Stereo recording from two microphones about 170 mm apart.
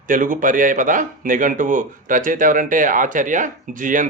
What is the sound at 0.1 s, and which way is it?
Speech, 50° right (ahead or behind).